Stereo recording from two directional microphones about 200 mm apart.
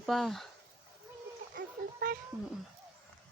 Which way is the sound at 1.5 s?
45° right (ahead or behind).